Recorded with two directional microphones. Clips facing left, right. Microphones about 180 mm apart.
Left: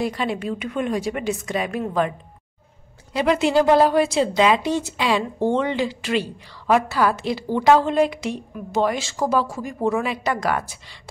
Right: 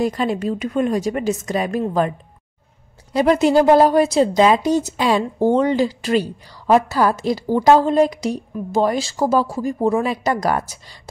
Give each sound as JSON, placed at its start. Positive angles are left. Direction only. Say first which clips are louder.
{"t": 0.0, "sound": "a woman's voice", "louder": "right 4 dB", "side_deg": -40}